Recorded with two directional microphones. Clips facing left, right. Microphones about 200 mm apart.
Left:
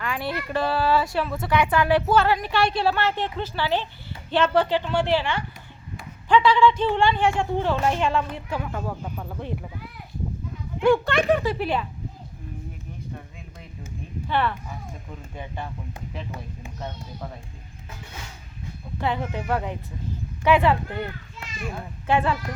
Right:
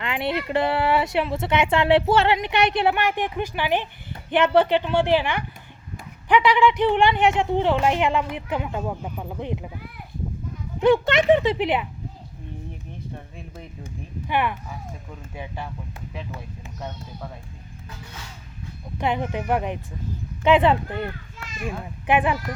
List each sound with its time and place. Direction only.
0.0 s a woman's voice: 20° right (ahead or behind)
10.8 s speech: 20° right (ahead or behind)
14.3 s a woman's voice: 15° right (ahead or behind)
18.9 s a woman's voice: 15° right (ahead or behind)